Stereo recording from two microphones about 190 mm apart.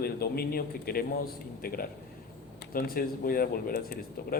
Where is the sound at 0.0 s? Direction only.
55° left (ahead or behind).